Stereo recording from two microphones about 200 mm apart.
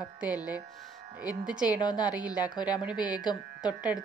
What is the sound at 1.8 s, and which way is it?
Speech, 20° left (ahead or behind).